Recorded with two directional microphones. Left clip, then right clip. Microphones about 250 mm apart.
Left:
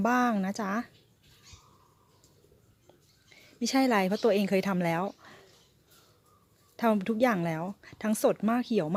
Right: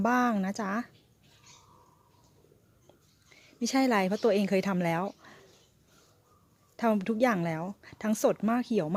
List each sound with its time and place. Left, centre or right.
0.0 s speech: centre
3.2 s a woman's voice: centre
6.7 s speech: centre